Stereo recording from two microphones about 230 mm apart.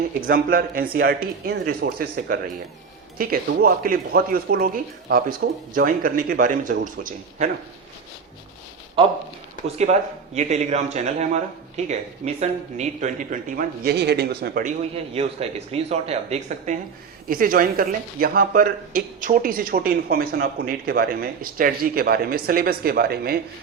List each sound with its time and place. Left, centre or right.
0.1 s speech: right
9.6 s speech: right
15.1 s speech: right
17.2 s speech: right